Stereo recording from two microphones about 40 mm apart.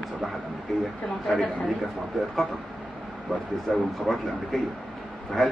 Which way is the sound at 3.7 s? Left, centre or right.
Centre.